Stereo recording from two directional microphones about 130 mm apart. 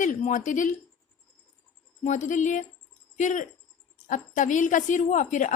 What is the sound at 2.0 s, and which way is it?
A woman's voice, 70° left (ahead or behind).